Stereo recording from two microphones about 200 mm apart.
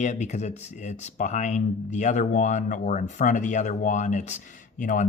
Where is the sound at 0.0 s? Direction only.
35° left (ahead or behind).